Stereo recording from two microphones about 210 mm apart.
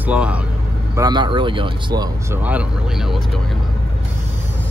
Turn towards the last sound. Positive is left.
turn(degrees=0)  # may be behind; listen again after turning